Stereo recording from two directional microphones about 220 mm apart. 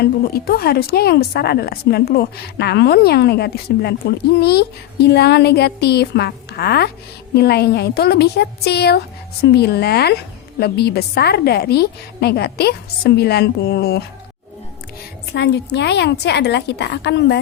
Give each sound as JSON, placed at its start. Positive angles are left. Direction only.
{"t": 0.0, "sound": "a woman's voice", "side_deg": 45}
{"t": 15.3, "sound": "a woman's voice", "side_deg": 50}